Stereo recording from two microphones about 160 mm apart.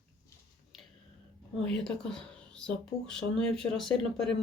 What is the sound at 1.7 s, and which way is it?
Speech, 5° left (ahead or behind).